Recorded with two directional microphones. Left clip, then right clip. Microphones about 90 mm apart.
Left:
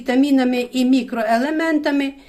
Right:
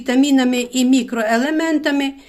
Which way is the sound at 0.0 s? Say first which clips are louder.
Right 1 dB; 40° right (ahead or behind).